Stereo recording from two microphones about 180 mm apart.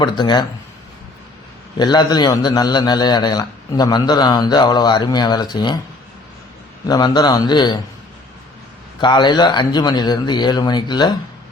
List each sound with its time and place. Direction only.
0.0 s a man's voice: 25° left (ahead or behind)
1.8 s a man's voice: 25° left (ahead or behind)
6.8 s a man's voice: 20° left (ahead or behind)
9.0 s a man's voice: 25° left (ahead or behind)